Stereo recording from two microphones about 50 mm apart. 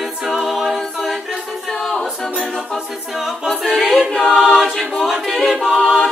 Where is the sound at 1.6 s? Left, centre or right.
Centre.